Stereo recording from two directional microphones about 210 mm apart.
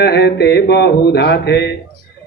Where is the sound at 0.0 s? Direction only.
50° left (ahead or behind).